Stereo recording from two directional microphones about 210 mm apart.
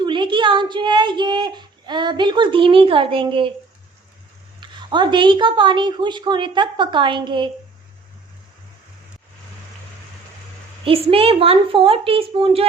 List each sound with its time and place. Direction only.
0.0 s a child's voice: 20° right (ahead or behind)
4.6 s a woman's voice: 20° right (ahead or behind)
10.8 s a woman's voice: 25° right (ahead or behind)